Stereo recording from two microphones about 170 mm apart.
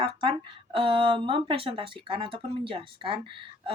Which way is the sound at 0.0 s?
30° right (ahead or behind).